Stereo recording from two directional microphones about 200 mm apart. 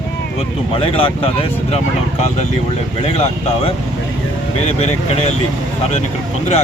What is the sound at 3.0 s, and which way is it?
Speech, 30° left (ahead or behind).